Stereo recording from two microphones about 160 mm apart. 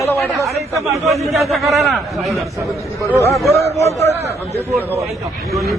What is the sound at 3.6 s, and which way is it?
Speech, 40° right (ahead or behind).